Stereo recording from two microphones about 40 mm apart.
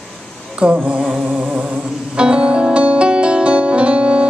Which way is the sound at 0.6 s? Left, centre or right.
Right.